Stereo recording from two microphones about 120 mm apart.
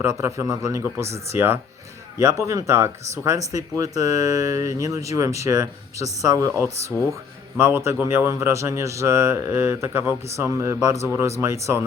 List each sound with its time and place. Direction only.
0.0 s speech: 25° right (ahead or behind)